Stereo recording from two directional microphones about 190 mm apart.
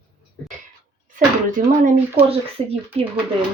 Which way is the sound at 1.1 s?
45° right (ahead or behind).